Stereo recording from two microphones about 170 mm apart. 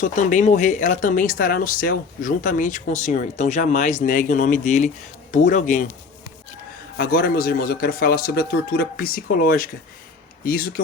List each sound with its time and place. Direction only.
0.0 s speech: 50° left (ahead or behind)
6.9 s a man's voice: 60° left (ahead or behind)